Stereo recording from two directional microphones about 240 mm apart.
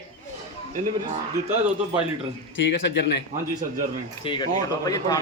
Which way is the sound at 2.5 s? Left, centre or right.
Left.